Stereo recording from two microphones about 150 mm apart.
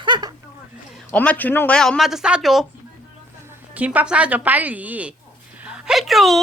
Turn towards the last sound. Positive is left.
turn(degrees=0)  # may be behind; listen again after turning